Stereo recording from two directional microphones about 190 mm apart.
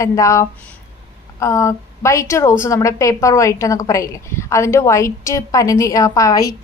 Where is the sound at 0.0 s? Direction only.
15° left (ahead or behind).